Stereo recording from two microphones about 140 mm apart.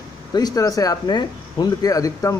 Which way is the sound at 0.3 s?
30° left (ahead or behind).